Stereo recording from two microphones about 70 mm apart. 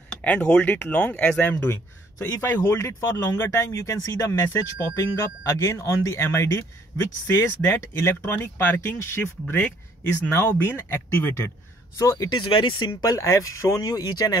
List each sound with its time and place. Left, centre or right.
0.2 s speech: centre
1.4 s speech: left
2.1 s speech: left
2.4 s speech: left
4.6 s speech: left
8.4 s speech: left
12.0 s speech: left
12.7 s speech: left